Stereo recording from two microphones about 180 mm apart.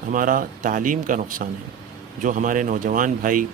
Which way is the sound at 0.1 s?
50° right (ahead or behind).